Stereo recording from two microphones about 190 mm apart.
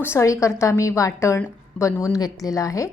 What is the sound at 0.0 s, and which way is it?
A woman's voice, 15° left (ahead or behind).